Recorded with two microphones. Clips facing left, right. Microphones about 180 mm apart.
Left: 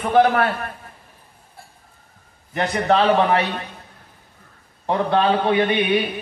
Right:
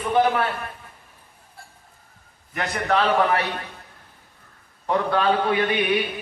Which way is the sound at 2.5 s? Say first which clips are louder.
Left 4 dB; 25° left (ahead or behind).